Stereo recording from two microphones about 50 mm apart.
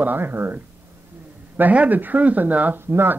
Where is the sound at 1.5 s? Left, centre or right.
Right.